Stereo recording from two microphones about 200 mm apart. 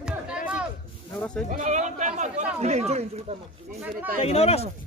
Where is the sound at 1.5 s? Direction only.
35° right (ahead or behind).